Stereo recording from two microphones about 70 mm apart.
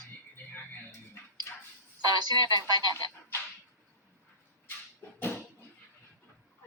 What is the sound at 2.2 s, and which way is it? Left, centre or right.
Speech, right.